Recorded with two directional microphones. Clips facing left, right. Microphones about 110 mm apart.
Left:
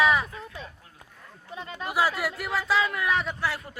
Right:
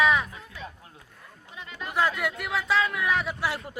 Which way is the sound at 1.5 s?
35° left (ahead or behind).